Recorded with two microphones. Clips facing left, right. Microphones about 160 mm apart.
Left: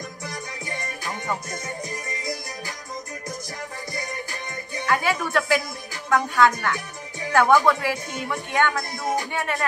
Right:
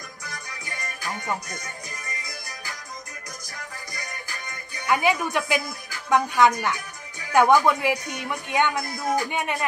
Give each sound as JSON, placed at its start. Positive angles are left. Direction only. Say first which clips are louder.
{"t": 0.2, "sound": "music", "louder": "left 5 dB", "side_deg": 25}
{"t": 3.9, "sound": "music", "louder": "left 7 dB", "side_deg": 25}
{"t": 4.8, "sound": "a woman's voice", "louder": "right 2 dB", "side_deg": -15}